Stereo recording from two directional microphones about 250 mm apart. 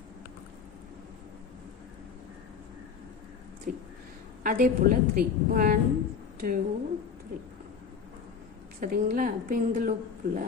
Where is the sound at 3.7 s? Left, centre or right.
Right.